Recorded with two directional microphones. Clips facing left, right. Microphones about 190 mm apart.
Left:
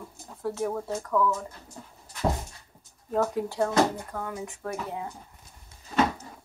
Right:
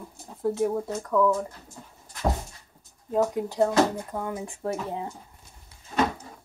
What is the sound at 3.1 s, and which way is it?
Speech, 15° right (ahead or behind).